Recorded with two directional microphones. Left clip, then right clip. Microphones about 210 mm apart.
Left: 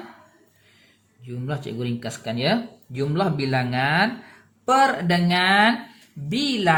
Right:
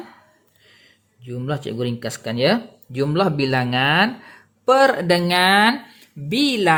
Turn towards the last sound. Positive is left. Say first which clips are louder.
# right 4 dB
turn(degrees=-40)  # may be behind; listen again after turning